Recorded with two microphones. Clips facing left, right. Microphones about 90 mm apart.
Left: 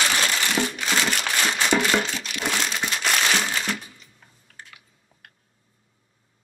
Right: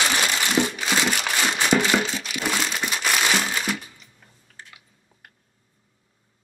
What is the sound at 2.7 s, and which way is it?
Crumpling, 10° right (ahead or behind).